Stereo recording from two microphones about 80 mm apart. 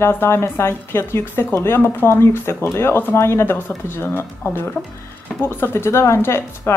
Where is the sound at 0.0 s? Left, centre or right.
Left.